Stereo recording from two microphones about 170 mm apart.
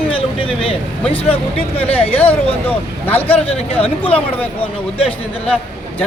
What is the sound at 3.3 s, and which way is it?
A man's voice, 35° left (ahead or behind).